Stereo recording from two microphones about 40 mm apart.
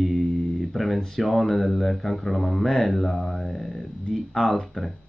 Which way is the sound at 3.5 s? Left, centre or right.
Centre.